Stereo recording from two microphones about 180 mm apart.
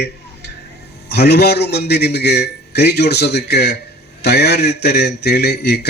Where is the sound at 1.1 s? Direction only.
60° left (ahead or behind).